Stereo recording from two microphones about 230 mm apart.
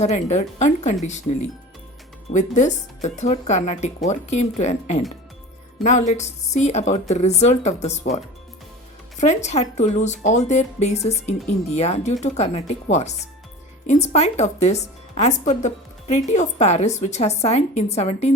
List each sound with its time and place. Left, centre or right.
0.0 s a woman's voice: left
9.2 s a woman's voice: left